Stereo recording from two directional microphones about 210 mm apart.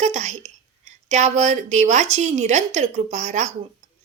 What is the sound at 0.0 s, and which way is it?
A woman's voice, 35° right (ahead or behind).